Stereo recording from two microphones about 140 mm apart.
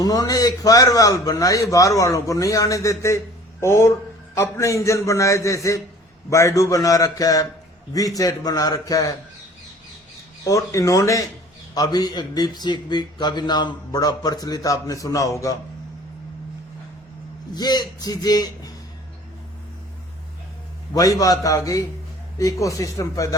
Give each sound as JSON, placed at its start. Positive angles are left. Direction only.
{"t": 0.0, "sound": "a man's voice", "side_deg": 25}
{"t": 10.4, "sound": "a man's voice", "side_deg": 25}
{"t": 17.5, "sound": "a man's voice", "side_deg": 30}
{"t": 20.9, "sound": "a man's voice", "side_deg": 25}